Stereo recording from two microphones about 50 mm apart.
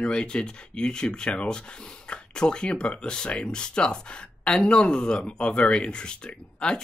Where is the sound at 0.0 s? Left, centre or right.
Centre.